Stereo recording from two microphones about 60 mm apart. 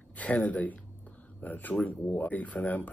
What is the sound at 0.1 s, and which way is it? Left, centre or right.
Speech, left.